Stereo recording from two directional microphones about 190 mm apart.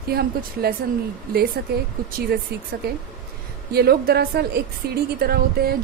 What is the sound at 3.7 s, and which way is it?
A woman's voice, 55° right (ahead or behind).